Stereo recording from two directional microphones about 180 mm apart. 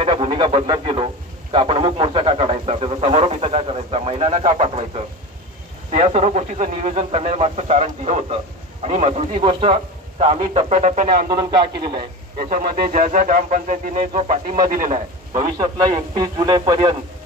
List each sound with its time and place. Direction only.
0.0 s a man's voice: 30° right (ahead or behind)
11.2 s speech: 25° right (ahead or behind)
12.4 s speech: 50° right (ahead or behind)
16.2 s speech: 25° right (ahead or behind)